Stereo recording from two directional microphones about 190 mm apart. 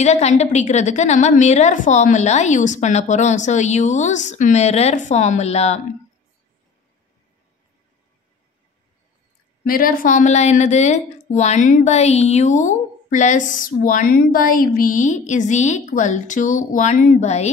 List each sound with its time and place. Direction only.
0.0 s a woman's voice: 35° left (ahead or behind)
9.7 s a woman's voice: 50° left (ahead or behind)